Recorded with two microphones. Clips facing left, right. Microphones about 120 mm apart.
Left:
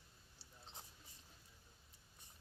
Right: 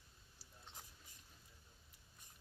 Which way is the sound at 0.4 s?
30° left (ahead or behind).